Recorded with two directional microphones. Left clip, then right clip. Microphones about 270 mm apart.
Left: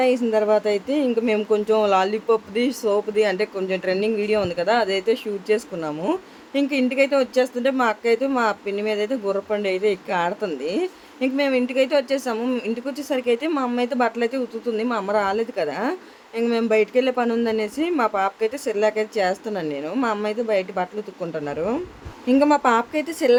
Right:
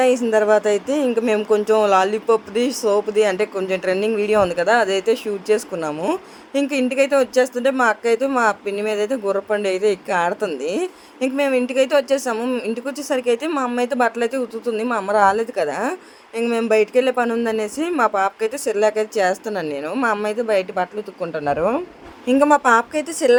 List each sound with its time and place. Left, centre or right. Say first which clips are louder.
0.0 s speech: right 3 dB; centre